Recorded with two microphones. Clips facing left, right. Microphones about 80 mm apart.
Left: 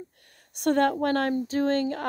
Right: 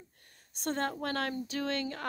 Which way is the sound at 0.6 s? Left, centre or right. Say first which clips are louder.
Left 11 dB; left.